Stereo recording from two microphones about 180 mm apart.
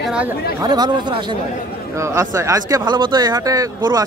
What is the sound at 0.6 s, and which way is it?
Speech, 20° right (ahead or behind).